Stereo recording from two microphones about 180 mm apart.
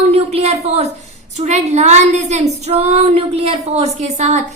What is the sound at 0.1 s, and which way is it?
A woman's voice, 35° right (ahead or behind).